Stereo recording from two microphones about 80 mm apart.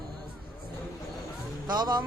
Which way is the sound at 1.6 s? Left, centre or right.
Right.